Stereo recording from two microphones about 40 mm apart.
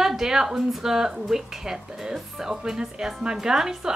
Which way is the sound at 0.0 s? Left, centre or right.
Centre.